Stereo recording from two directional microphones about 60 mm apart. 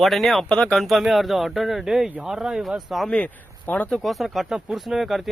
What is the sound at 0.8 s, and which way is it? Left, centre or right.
Speech, centre.